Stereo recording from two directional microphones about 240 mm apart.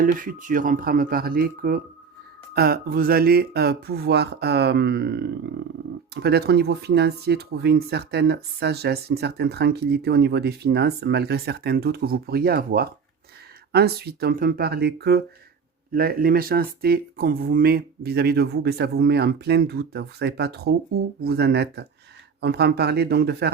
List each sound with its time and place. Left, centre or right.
0.0 s speech: right